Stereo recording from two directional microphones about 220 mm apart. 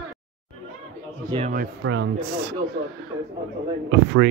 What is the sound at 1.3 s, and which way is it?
Speech, 20° right (ahead or behind).